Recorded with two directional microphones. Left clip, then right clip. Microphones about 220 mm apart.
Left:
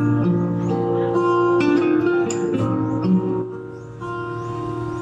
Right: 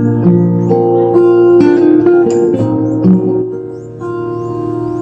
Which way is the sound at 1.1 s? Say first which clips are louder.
Right 10 dB; 35° right (ahead or behind).